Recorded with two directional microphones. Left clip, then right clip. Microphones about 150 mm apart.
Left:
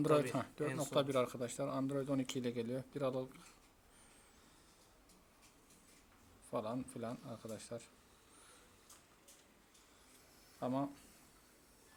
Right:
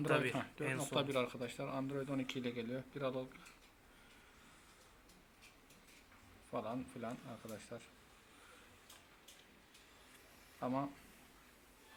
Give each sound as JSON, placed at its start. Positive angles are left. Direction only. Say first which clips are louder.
{"t": 0.1, "sound": "speech", "louder": "right 1 dB", "side_deg": 90}
{"t": 6.5, "sound": "speech", "louder": "left 2 dB", "side_deg": 90}
{"t": 10.6, "sound": "speech", "louder": "left 1 dB", "side_deg": 65}